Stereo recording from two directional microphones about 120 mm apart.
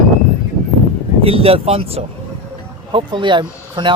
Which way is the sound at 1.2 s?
55° right (ahead or behind).